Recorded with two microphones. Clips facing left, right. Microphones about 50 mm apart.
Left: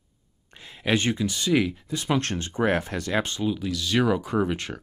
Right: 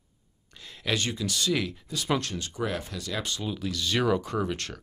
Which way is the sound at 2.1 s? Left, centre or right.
Left.